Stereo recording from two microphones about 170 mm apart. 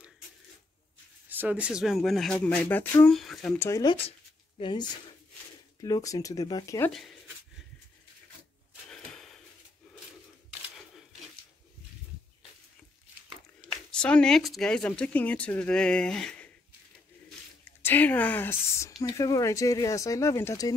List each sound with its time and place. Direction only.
1.3 s speech: 10° right (ahead or behind); by 3.8 s 15° left (ahead or behind)
4.6 s speech: 30° left (ahead or behind)
8.9 s gasp: 5° left (ahead or behind)
13.8 s speech: 5° left (ahead or behind)
17.8 s speech: 10° left (ahead or behind)